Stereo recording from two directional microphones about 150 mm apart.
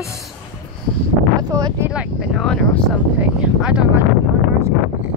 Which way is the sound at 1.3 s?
25° right (ahead or behind).